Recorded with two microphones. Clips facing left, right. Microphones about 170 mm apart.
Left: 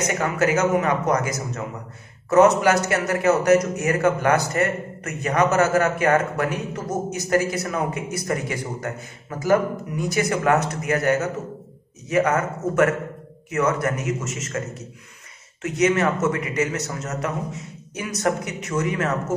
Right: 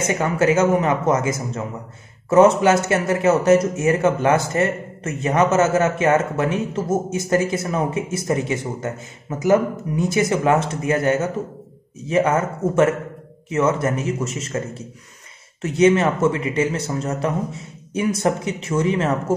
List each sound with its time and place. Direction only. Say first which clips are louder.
0.0 s a man's voice: right 3 dB; 30° right (ahead or behind)